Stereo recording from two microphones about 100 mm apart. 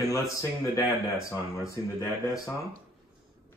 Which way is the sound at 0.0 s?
35° left (ahead or behind).